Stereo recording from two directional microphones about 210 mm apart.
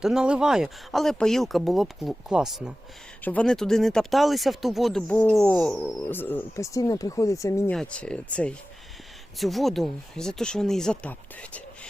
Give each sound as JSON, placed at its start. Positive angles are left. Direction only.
{"t": 0.0, "sound": "speech", "side_deg": -5}